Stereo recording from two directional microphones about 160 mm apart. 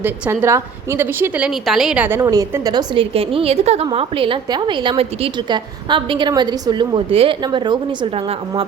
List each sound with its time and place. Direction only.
0.0 s a woman's voice: 15° right (ahead or behind)
2.2 s a woman's voice: 20° right (ahead or behind)